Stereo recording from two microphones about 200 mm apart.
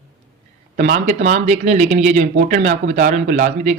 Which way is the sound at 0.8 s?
40° right (ahead or behind).